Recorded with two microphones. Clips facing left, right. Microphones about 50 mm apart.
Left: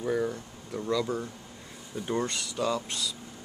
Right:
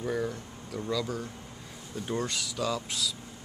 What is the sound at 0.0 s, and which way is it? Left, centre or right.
Speech, centre.